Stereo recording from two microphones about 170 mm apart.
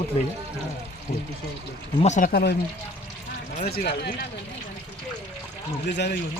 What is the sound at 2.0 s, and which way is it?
Speech, 50° left (ahead or behind).